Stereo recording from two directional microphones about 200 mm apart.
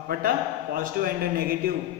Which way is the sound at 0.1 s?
45° right (ahead or behind).